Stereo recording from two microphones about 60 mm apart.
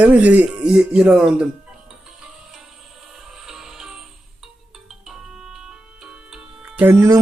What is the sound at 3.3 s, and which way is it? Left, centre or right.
Music, centre.